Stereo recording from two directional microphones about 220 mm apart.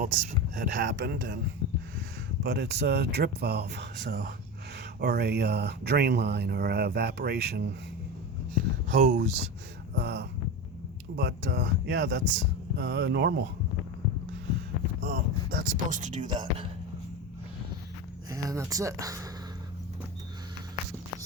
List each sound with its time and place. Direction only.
0.0 s speech: 40° right (ahead or behind)
2.4 s speech: 50° right (ahead or behind)
8.9 s speech: 45° right (ahead or behind)
15.0 s speech: 45° right (ahead or behind)
16.2 s speech: 20° right (ahead or behind)
18.3 s speech: 15° right (ahead or behind)